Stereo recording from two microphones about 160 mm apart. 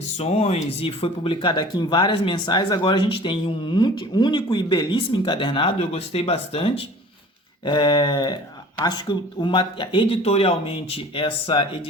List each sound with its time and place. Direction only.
0.2 s speech: 40° left (ahead or behind)
7.6 s a sound: 30° left (ahead or behind)
8.8 s speech: 25° left (ahead or behind)